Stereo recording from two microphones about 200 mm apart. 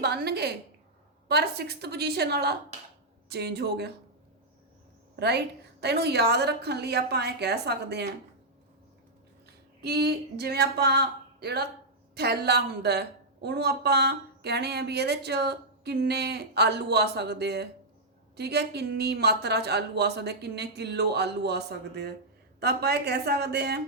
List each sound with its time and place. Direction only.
0.0 s a woman's voice: 55° right (ahead or behind)
5.8 s a woman's voice: 55° right (ahead or behind)
9.8 s a woman's voice: 55° right (ahead or behind)